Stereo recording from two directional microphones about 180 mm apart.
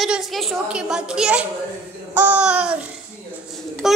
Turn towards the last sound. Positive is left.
turn(degrees=0)  # may be behind; listen again after turning